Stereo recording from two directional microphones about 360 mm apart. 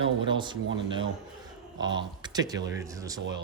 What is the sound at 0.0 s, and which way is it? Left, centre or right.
Speech, centre.